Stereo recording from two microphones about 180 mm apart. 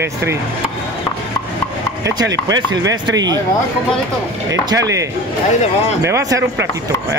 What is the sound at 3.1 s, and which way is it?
Speech, 20° right (ahead or behind).